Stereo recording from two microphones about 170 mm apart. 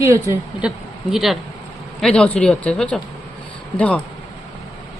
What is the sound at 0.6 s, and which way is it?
Speech, 5° right (ahead or behind).